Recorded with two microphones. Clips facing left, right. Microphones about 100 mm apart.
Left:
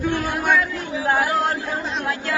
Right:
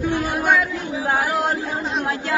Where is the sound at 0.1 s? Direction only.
15° right (ahead or behind).